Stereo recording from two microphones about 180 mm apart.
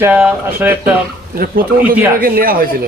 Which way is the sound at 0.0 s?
10° right (ahead or behind).